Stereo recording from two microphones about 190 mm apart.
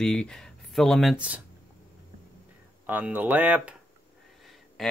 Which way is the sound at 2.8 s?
10° right (ahead or behind).